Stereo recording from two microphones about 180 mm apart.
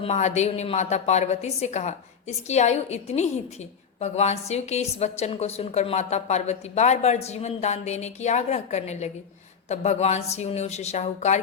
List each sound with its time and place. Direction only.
0.0 s a woman's voice: 40° left (ahead or behind)